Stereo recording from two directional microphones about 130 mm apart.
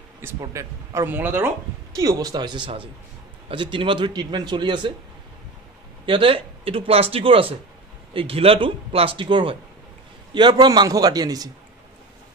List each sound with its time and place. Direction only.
0.4 s speech: 25° right (ahead or behind)
2.0 s a man's voice: 30° right (ahead or behind)
6.0 s a man's voice: 45° right (ahead or behind)